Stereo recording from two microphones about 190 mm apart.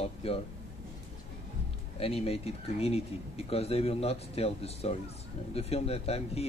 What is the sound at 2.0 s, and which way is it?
Speech, 30° left (ahead or behind).